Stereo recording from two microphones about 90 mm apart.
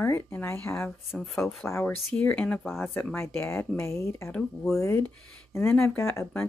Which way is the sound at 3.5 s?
30° left (ahead or behind).